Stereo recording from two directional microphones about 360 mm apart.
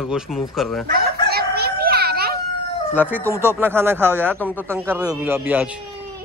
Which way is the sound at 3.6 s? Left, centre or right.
Centre.